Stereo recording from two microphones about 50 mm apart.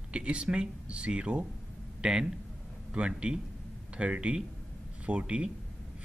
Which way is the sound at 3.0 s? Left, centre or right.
Right.